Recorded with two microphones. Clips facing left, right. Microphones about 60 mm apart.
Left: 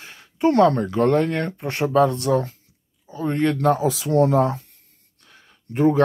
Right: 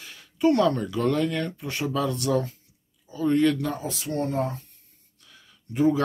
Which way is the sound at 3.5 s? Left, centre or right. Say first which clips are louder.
Left 11 dB; left.